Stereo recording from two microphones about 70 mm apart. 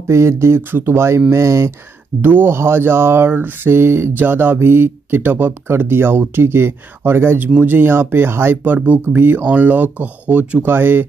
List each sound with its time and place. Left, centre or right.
0.1 s speech: right
2.2 s speech: right